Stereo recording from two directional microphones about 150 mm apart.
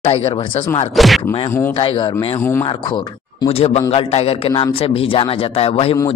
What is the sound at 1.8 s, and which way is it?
Speech, 35° left (ahead or behind).